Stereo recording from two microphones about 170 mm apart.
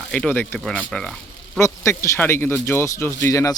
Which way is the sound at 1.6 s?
15° left (ahead or behind).